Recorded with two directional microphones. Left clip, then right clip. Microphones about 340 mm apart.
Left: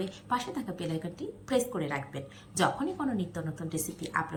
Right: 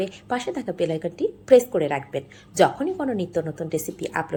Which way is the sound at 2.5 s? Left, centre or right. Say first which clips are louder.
Right 10 dB; centre.